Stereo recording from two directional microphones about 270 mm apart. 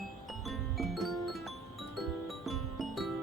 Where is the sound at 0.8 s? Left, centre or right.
Centre.